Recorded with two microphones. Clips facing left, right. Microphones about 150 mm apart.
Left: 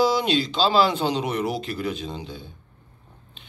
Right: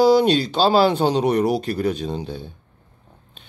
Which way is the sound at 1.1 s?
40° right (ahead or behind).